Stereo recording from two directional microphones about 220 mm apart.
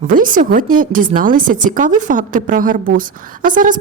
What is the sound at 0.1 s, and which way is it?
A woman's voice, 40° right (ahead or behind).